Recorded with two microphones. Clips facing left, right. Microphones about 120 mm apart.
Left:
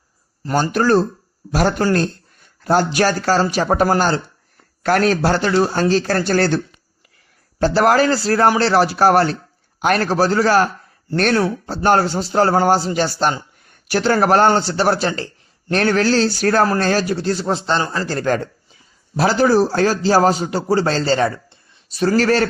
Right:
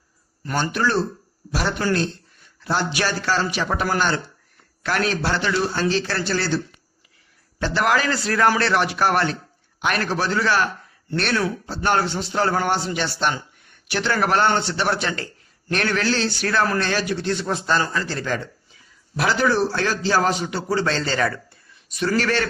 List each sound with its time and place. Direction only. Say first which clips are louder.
0.4 s a man's voice: left 6 dB; 40° left (ahead or behind)
7.6 s speech: left 7 dB; 40° left (ahead or behind)
18.0 s a man's voice: left 7 dB; 45° left (ahead or behind)